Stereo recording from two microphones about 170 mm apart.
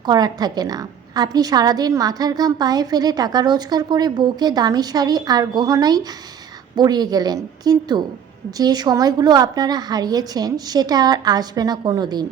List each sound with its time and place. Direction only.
0.0 s a woman's voice: 25° right (ahead or behind)